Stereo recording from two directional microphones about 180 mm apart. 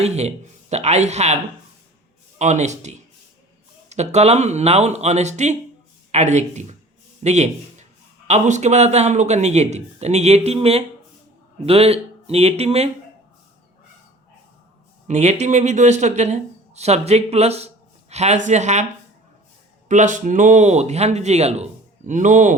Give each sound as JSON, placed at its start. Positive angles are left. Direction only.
{"t": 0.0, "sound": "speech", "side_deg": -35}
{"t": 2.4, "sound": "speech", "side_deg": -40}
{"t": 15.0, "sound": "speech", "side_deg": -40}
{"t": 19.9, "sound": "speech", "side_deg": -45}